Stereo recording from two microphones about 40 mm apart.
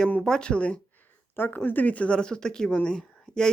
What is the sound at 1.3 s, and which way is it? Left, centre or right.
Speech, left.